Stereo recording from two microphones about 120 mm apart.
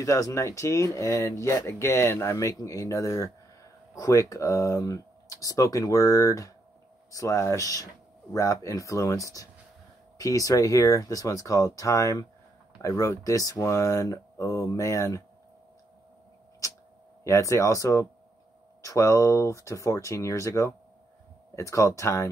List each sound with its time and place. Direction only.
0.0 s speech: 25° left (ahead or behind)
16.6 s a sound: 30° left (ahead or behind)
17.2 s speech: 25° left (ahead or behind)